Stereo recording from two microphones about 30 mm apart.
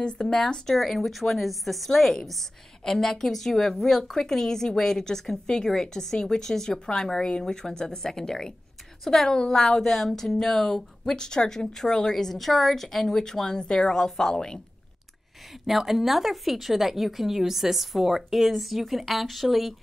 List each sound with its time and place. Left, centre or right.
0.0 s speech: left
0.7 s a woman's voice: centre
2.8 s a woman's voice: centre
11.1 s speech: left
12.4 s a woman's voice: centre; by 14.6 s left
15.6 s a woman's voice: centre